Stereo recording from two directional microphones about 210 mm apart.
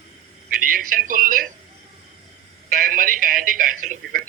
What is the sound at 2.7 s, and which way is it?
Speech, 40° right (ahead or behind).